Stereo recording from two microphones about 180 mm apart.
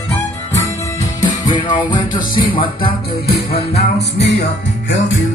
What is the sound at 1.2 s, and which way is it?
Music, 25° left (ahead or behind).